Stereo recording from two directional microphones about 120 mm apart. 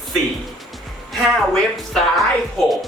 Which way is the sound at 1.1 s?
Centre (ahead or behind).